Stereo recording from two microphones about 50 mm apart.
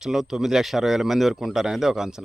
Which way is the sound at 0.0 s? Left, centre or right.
Centre.